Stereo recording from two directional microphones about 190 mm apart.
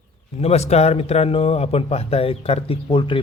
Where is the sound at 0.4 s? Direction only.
35° left (ahead or behind).